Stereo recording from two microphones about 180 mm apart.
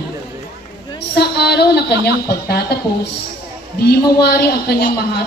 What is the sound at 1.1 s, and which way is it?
A woman's voice, 65° left (ahead or behind).